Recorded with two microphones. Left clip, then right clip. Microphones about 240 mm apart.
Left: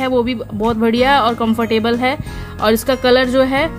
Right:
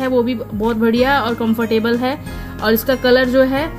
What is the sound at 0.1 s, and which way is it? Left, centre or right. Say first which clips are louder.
Speech: even; left.